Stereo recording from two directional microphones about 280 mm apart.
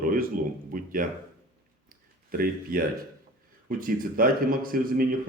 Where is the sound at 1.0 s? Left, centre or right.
Right.